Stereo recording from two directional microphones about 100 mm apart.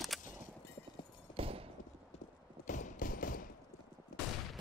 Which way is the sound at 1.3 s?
70° right (ahead or behind).